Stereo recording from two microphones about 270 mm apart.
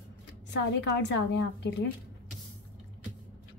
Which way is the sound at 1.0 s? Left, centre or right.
Left.